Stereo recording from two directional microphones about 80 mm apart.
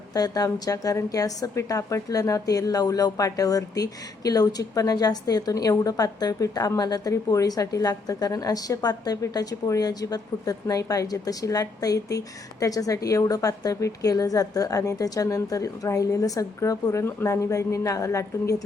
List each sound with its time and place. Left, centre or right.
0.1 s a woman's voice: left